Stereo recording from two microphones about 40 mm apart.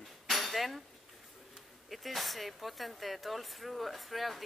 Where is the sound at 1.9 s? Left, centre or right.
Centre.